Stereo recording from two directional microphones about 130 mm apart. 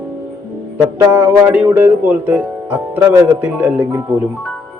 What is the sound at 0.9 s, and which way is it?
Speech, 10° right (ahead or behind).